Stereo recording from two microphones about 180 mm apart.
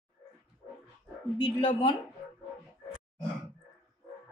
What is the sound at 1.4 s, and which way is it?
Speech, 30° left (ahead or behind).